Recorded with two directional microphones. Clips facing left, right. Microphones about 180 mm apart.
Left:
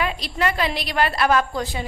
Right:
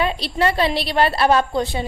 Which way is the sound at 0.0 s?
30° right (ahead or behind).